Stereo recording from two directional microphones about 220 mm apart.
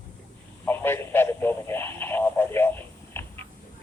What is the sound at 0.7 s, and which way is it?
Radio, 10° left (ahead or behind).